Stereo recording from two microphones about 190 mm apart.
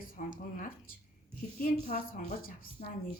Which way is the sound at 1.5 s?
45° left (ahead or behind).